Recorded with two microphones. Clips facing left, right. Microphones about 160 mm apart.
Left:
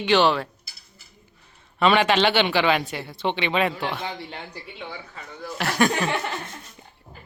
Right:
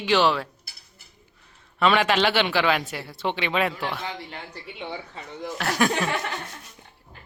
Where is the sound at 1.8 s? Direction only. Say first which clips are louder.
Left 2 dB; centre (ahead or behind).